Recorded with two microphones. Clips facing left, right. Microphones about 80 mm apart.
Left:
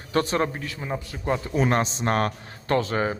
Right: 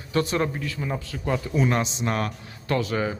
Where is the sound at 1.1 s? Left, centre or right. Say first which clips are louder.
Left 2 dB; left.